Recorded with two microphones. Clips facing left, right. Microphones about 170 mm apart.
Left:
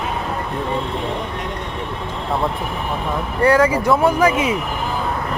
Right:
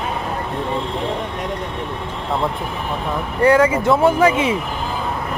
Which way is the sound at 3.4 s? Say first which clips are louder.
Right 1 dB; 25° right (ahead or behind).